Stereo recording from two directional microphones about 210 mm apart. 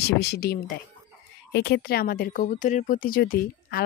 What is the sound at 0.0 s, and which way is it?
Speech, 50° left (ahead or behind).